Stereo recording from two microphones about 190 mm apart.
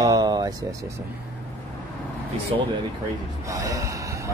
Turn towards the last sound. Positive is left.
turn(degrees=-15)  # may be behind; listen again after turning